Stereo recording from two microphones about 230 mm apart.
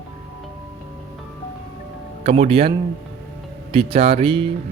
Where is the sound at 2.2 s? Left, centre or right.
Right.